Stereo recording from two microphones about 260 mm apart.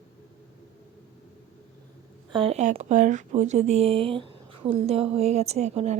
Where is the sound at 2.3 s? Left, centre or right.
Right.